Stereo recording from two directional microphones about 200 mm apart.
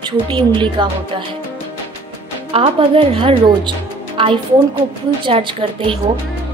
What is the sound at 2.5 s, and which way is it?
A woman's voice, 25° right (ahead or behind).